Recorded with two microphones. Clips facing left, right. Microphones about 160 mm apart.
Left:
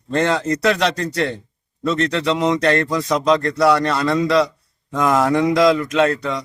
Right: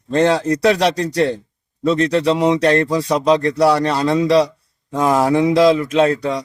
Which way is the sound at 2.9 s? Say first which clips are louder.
Right 2 dB; 35° right (ahead or behind).